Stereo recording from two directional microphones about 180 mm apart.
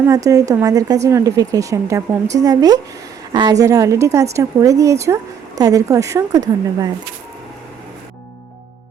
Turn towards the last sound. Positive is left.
turn(degrees=-20)  # may be behind; listen again after turning